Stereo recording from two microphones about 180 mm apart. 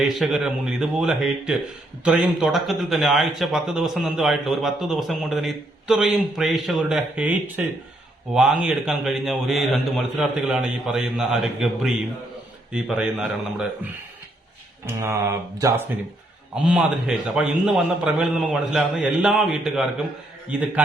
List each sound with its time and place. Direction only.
0.0 s speech: centre (ahead or behind)
14.8 s speech: 15° right (ahead or behind)
16.6 s speech: 5° right (ahead or behind)